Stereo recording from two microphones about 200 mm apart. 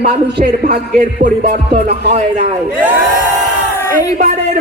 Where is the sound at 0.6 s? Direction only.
40° right (ahead or behind).